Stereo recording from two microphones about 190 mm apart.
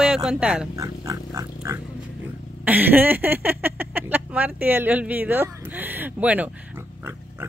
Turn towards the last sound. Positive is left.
turn(degrees=-10)  # may be behind; listen again after turning